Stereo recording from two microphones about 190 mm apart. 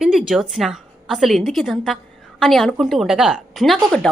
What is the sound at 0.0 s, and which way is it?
A woman's voice, 5° right (ahead or behind).